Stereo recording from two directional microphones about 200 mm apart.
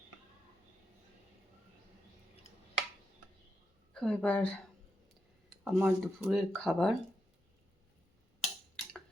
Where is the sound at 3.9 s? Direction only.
5° left (ahead or behind).